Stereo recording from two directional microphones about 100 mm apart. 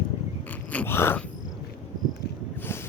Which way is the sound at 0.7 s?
20° left (ahead or behind).